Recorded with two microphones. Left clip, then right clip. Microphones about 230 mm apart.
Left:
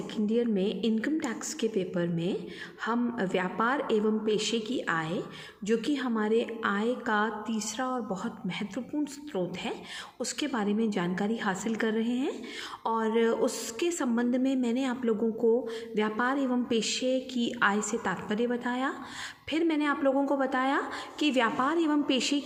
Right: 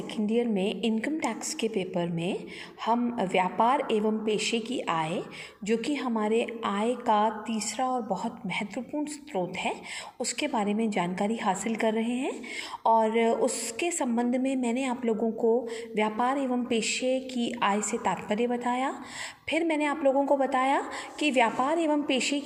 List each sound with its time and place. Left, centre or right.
0.3 s a woman's voice: centre
10.2 s a woman's voice: centre
16.0 s a woman's voice: centre